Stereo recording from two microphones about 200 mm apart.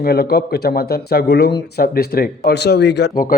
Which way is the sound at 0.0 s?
50° left (ahead or behind).